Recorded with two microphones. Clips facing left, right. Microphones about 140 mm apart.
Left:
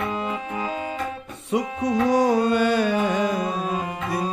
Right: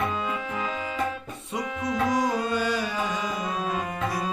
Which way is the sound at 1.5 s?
70° left (ahead or behind).